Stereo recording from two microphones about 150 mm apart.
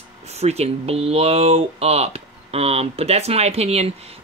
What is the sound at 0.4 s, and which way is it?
Speech, 45° right (ahead or behind).